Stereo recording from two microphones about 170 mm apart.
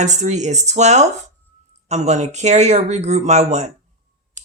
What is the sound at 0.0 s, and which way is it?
Speech, 45° right (ahead or behind).